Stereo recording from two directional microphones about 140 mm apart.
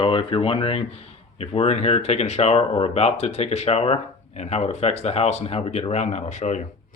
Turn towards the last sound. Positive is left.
turn(degrees=60)  # may be behind; listen again after turning